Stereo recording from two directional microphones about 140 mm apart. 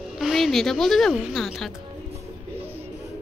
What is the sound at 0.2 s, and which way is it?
Speech, centre (ahead or behind).